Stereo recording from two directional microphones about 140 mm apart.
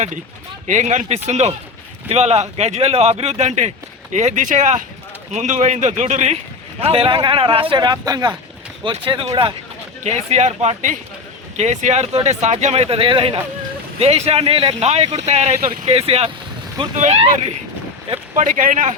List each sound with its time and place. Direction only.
0.7 s a man's voice: 60° right (ahead or behind); by 9.6 s 30° right (ahead or behind)
10.0 s a man's voice: 50° right (ahead or behind)
15.0 s speech: 25° right (ahead or behind)
15.3 s a man's voice: 55° right (ahead or behind)
16.9 s speech: 55° right (ahead or behind)
18.1 s speech: 65° right (ahead or behind)